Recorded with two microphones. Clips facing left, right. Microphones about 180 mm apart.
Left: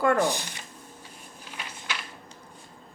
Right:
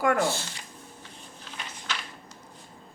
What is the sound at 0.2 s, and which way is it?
Speech, 15° left (ahead or behind).